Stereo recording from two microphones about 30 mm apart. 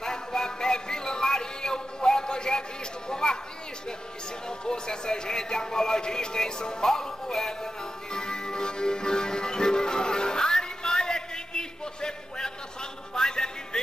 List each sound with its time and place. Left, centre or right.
0.0 s music: left
3.1 s a sound: left
4.5 s music: left